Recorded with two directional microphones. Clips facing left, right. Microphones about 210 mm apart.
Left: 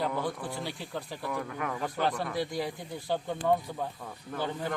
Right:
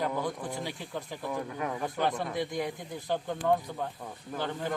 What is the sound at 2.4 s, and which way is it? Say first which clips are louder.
Speech: even; 5° left (ahead or behind).